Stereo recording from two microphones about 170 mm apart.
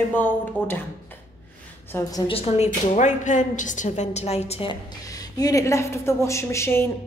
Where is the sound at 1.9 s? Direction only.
20° left (ahead or behind).